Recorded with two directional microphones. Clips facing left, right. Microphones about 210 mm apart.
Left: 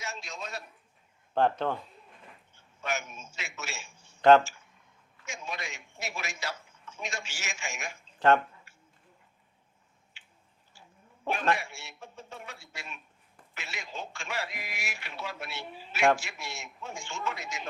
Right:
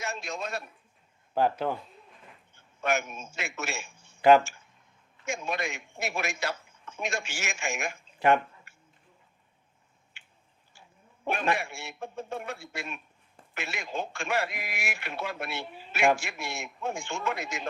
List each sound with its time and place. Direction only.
0.0 s a sound: 55° right (ahead or behind)
1.3 s speech: 5° right (ahead or behind)
2.8 s a man's voice: 55° right (ahead or behind)
4.2 s speech: 10° right (ahead or behind)
5.2 s a man's voice: 55° right (ahead or behind)
8.7 s chop: 55° right (ahead or behind)
10.2 s chewing: 55° right (ahead or behind)
11.5 s a man's voice: 55° right (ahead or behind)